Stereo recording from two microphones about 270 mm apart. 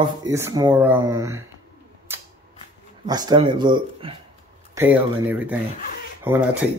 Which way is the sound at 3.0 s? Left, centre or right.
Centre.